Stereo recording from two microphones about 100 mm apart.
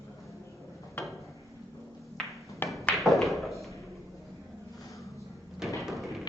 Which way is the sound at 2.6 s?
20° left (ahead or behind).